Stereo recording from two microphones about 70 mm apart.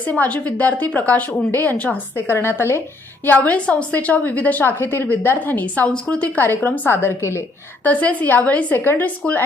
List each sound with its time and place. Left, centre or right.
0.0 s a woman's voice: left
3.2 s a woman's voice: left
7.9 s a woman's voice: left